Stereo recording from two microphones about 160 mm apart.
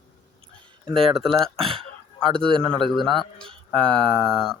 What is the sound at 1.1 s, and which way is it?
Fowl, centre (ahead or behind).